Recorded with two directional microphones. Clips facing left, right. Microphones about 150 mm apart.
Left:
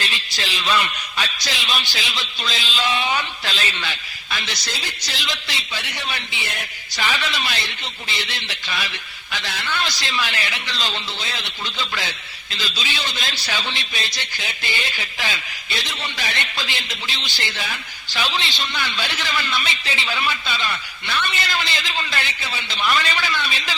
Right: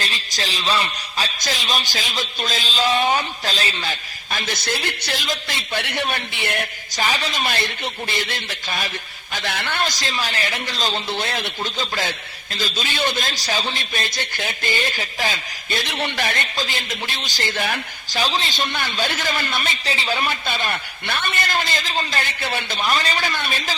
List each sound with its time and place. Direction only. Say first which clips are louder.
0.0 s a man's voice: right 1 dB; 40° right (ahead or behind); by 7.0 s 60° right (ahead or behind)
7.0 s a man's voice: right 2 dB; 40° right (ahead or behind)
11.1 s a man's voice: right 7 dB; 60° right (ahead or behind)
18.2 s a man's voice: right 2 dB; 40° right (ahead or behind); by 22.8 s 60° right (ahead or behind)
22.8 s a man's voice: left 1 dB; 40° right (ahead or behind)